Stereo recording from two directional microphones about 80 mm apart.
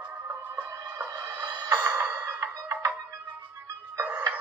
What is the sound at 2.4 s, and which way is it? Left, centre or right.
Music, right.